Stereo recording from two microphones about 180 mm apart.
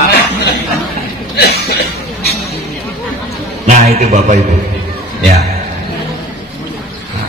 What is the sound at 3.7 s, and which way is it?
Speech, 40° right (ahead or behind).